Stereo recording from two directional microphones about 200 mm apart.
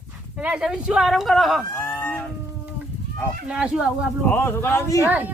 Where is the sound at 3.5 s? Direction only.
5° right (ahead or behind).